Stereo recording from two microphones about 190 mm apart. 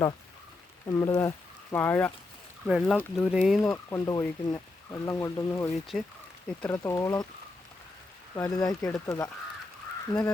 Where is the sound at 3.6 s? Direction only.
15° left (ahead or behind).